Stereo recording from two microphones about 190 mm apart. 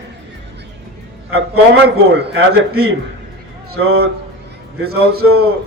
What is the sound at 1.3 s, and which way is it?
A man's voice, 55° right (ahead or behind).